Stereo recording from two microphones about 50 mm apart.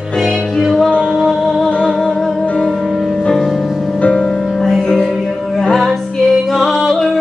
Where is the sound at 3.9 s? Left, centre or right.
Left.